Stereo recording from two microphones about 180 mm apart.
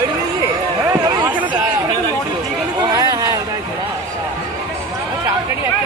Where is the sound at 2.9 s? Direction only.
20° right (ahead or behind).